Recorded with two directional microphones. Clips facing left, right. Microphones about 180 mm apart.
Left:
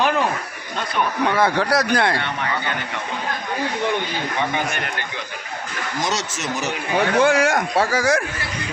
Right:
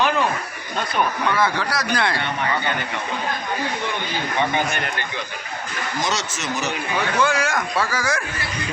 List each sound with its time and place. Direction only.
1.3 s a man's voice: 55° left (ahead or behind)
6.1 s a man's voice: 50° left (ahead or behind); by 8.2 s 65° left (ahead or behind)